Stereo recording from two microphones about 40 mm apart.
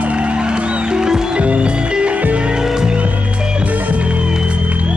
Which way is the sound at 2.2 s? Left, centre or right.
Right.